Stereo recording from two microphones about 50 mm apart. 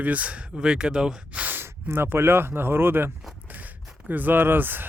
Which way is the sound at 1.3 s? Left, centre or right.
Right.